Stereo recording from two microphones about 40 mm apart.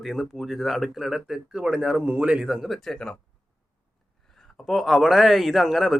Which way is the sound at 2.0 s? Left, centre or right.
Right.